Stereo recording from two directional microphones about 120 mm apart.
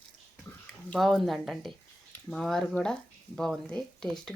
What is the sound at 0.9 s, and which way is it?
A woman's voice, centre (ahead or behind).